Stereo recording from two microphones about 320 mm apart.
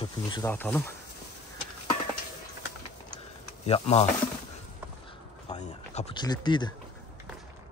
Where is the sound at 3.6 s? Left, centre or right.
Centre.